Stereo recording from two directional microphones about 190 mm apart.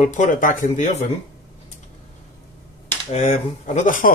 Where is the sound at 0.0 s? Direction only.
40° left (ahead or behind).